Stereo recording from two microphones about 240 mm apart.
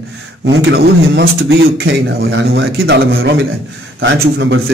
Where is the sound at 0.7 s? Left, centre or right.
Right.